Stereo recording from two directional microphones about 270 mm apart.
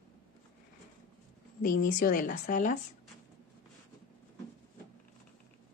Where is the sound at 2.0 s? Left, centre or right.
Left.